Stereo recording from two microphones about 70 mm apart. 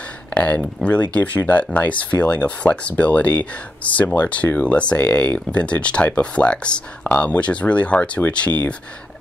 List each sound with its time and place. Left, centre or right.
0.3 s a sound: left
0.8 s speech: centre
1.1 s speech: left